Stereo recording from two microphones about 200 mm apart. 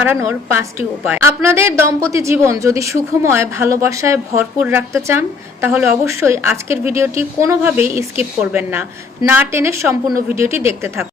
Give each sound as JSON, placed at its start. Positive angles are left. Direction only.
{"t": 0.0, "sound": "speech", "side_deg": -10}